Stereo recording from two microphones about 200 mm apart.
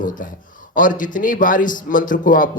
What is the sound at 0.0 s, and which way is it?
A man's voice, 40° left (ahead or behind).